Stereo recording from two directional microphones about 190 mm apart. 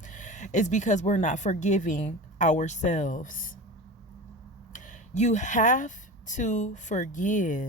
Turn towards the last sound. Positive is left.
turn(degrees=45)  # may be behind; listen again after turning